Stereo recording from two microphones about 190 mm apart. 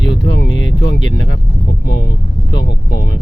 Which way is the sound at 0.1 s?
75° left (ahead or behind).